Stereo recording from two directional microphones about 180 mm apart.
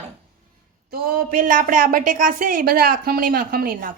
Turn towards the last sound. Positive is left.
turn(degrees=-55)  # may be behind; listen again after turning